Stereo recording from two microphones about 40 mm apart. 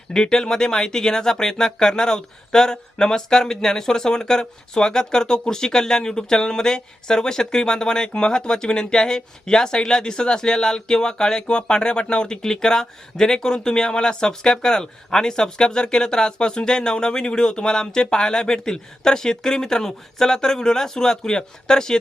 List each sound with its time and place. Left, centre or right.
0.1 s speech: centre